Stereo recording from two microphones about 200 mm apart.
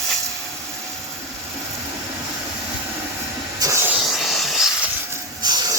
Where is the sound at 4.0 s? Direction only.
Centre (ahead or behind).